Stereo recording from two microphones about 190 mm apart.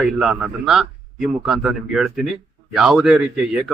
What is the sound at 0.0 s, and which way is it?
A man's voice, 5° right (ahead or behind).